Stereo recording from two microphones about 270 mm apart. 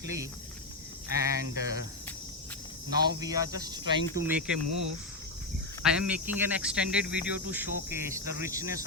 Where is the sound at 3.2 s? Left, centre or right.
Centre.